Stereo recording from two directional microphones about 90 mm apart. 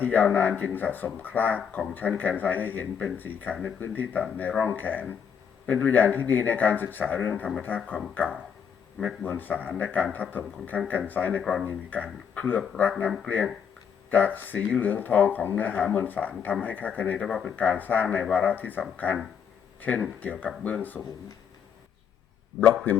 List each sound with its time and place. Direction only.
0.0 s speech: 20° left (ahead or behind)